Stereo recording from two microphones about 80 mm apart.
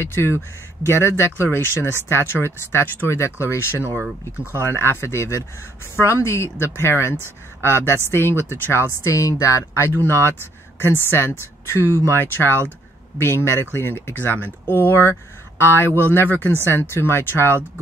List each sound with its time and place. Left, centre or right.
0.0 s speech: left
9.0 s speech: left
10.0 s speech: left